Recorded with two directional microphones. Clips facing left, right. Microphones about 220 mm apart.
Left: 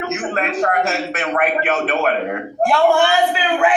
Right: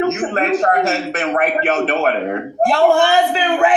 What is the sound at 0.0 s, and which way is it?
A man's voice, 35° right (ahead or behind).